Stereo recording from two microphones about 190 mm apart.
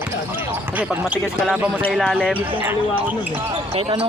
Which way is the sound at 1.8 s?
5° left (ahead or behind).